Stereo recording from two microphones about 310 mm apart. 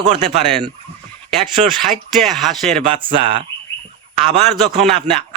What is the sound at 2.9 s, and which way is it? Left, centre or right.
Speech, centre.